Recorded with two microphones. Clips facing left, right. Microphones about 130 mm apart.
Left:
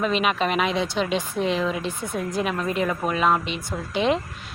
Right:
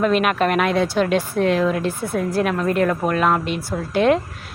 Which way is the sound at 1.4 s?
55° right (ahead or behind).